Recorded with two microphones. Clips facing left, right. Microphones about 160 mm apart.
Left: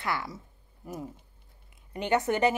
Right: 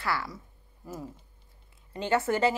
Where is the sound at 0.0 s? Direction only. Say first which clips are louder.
Right 1 dB; 20° left (ahead or behind).